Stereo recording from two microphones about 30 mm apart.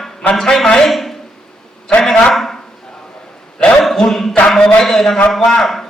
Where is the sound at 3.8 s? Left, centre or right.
Centre.